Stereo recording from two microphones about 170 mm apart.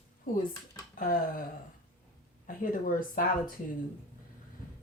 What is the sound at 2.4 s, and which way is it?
Speech, 55° left (ahead or behind).